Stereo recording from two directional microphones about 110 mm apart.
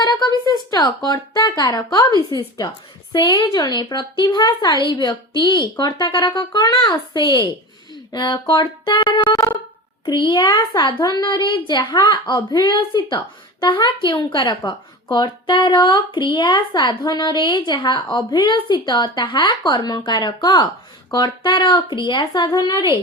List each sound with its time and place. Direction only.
0.0 s a woman's voice: 40° left (ahead or behind)
9.3 s a sound: 35° left (ahead or behind)
10.1 s a woman's voice: 40° left (ahead or behind)